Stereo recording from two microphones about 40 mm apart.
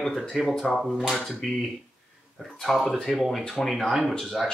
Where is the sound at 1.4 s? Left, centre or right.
Centre.